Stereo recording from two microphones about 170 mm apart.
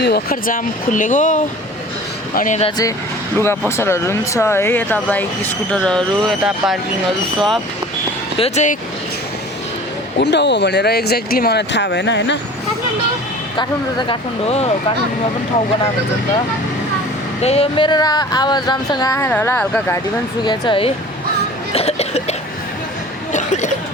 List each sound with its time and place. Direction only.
0.0 s speech: 65° left (ahead or behind); by 2.6 s 50° left (ahead or behind)
3.3 s speech: 15° left (ahead or behind)
8.4 s speech: 40° left (ahead or behind)
10.2 s speech: 90° left
14.1 s speech: 35° left (ahead or behind)
17.4 s speech: 35° left (ahead or behind); by 20.0 s 10° left (ahead or behind)
20.4 s speech: 30° left (ahead or behind)
21.7 s cough: 35° left (ahead or behind)
23.3 s a sound: 45° left (ahead or behind)